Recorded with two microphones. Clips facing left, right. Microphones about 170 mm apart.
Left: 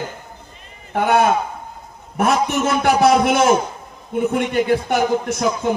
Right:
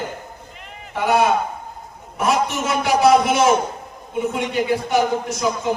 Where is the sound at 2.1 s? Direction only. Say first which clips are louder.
Left 2 dB; 55° left (ahead or behind).